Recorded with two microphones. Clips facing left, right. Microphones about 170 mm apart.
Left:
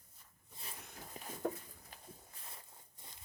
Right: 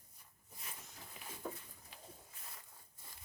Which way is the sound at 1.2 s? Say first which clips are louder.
Left 5 dB; 40° left (ahead or behind).